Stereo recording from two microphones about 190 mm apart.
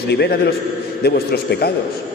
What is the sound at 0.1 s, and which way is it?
Speech, 60° left (ahead or behind).